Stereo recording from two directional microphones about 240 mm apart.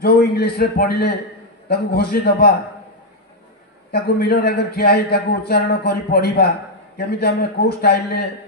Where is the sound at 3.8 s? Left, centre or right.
Left.